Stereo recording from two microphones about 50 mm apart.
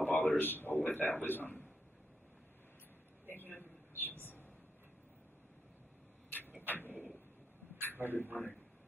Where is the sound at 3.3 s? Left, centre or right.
Left.